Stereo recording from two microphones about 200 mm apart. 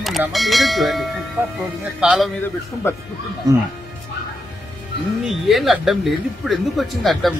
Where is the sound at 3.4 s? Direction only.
20° right (ahead or behind).